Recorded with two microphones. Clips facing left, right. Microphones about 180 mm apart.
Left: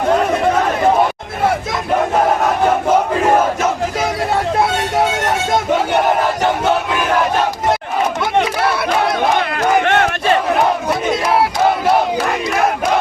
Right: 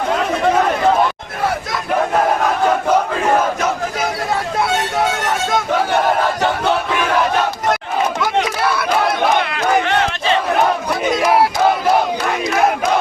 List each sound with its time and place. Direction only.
9.4 s crowd: 50° left (ahead or behind)